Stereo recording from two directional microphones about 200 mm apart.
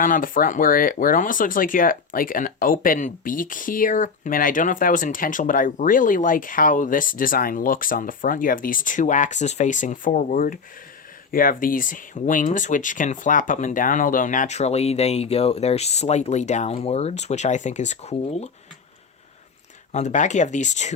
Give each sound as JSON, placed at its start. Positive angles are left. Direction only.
{"t": 0.0, "sound": "speech", "side_deg": 45}
{"t": 19.9, "sound": "speech", "side_deg": 35}